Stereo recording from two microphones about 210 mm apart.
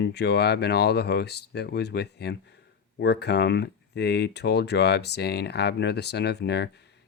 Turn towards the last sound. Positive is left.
turn(degrees=50)  # may be behind; listen again after turning